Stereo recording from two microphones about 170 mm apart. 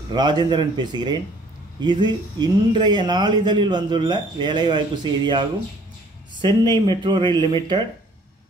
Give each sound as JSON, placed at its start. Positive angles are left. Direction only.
{"t": 0.1, "sound": "speech", "side_deg": -25}